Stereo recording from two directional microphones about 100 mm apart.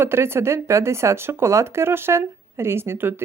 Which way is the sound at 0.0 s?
25° right (ahead or behind).